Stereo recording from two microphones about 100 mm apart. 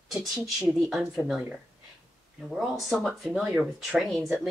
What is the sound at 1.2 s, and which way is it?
Speech, 15° right (ahead or behind).